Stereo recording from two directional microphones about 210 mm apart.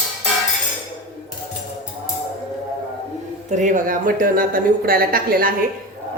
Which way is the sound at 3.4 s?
35° right (ahead or behind).